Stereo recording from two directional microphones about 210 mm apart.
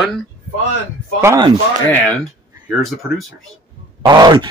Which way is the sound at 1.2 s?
15° right (ahead or behind).